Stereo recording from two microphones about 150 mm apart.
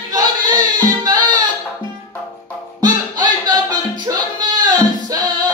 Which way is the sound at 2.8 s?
25° right (ahead or behind).